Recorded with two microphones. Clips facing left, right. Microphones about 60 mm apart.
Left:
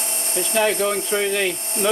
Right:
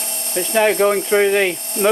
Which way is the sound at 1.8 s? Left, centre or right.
Right.